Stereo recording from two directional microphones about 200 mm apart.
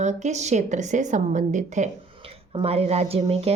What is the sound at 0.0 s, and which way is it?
A woman's voice, 35° right (ahead or behind).